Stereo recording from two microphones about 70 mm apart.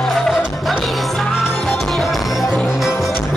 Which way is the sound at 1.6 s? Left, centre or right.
Centre.